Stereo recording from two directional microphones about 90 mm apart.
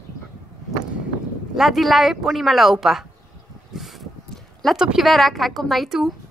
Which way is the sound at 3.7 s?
Centre (ahead or behind).